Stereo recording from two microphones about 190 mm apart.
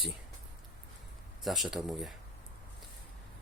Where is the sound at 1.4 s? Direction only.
Centre (ahead or behind).